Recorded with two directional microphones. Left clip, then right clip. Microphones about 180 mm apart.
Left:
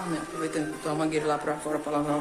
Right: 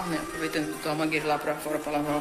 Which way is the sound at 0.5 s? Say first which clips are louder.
Right 1 dB; 15° left (ahead or behind).